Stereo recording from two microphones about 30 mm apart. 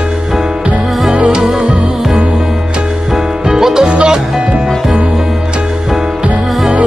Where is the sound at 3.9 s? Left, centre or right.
Right.